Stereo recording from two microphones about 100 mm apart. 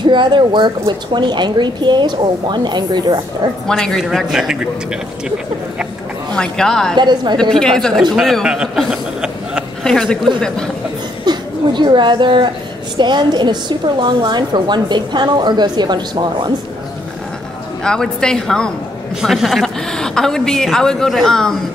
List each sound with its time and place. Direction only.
0.0 s a woman's voice: 50° right (ahead or behind)
3.6 s a woman's voice: 5° left (ahead or behind)
6.3 s speech: 5° left (ahead or behind)
7.0 s a woman's voice: 45° right (ahead or behind)
7.3 s a man's voice: 5° left (ahead or behind)
9.8 s a woman's voice: 5° left (ahead or behind)
11.2 s a woman's voice: 50° right (ahead or behind)
17.8 s a woman's voice: 5° left (ahead or behind)